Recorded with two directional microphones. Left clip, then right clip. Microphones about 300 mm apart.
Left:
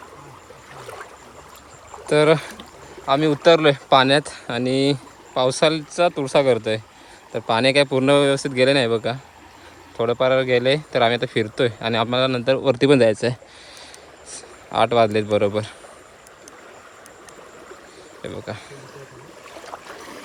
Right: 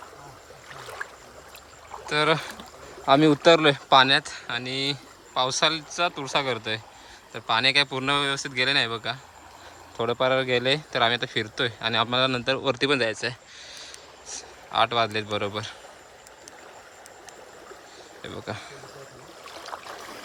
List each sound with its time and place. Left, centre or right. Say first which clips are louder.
2.0 s speech: left 7 dB; centre
3.1 s speech: left 2 dB; right
18.2 s speech: left 4 dB; centre